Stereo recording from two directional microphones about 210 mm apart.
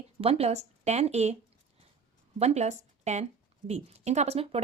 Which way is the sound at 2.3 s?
30° right (ahead or behind).